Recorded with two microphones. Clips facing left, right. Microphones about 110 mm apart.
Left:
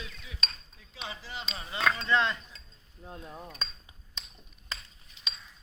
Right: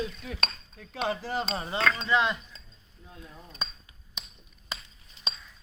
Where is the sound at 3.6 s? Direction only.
15° right (ahead or behind).